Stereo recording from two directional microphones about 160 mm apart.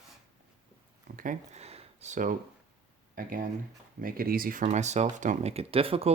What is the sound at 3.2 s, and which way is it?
Speech, 60° right (ahead or behind).